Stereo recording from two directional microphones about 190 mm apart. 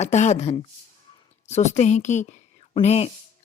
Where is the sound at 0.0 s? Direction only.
35° left (ahead or behind).